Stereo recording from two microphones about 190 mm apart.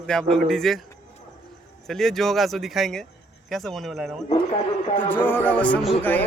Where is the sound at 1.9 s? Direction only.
Centre (ahead or behind).